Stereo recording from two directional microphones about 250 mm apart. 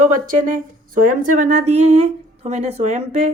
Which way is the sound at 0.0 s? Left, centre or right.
Right.